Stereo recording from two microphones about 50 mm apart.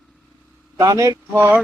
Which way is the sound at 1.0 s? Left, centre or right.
Right.